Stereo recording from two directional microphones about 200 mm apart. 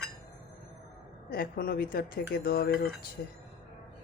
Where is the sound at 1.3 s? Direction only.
45° left (ahead or behind).